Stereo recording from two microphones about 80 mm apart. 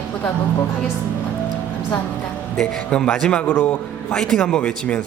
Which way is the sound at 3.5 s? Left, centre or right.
Left.